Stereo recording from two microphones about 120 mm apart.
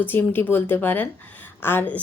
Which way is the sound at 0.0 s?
15° left (ahead or behind).